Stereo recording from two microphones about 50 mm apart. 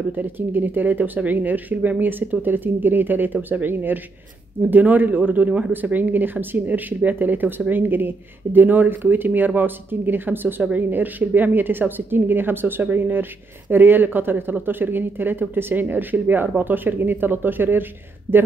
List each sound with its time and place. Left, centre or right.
0.1 s speech: right